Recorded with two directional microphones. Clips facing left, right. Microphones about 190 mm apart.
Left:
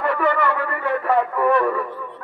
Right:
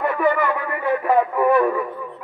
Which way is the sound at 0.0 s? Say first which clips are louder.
Right 1 dB; 15° right (ahead or behind).